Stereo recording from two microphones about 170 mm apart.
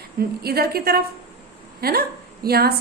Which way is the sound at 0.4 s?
65° right (ahead or behind).